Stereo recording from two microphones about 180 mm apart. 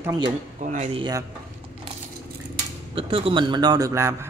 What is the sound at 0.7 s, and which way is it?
Speech, 35° right (ahead or behind).